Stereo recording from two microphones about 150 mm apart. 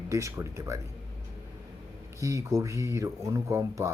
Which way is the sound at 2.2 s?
20° right (ahead or behind).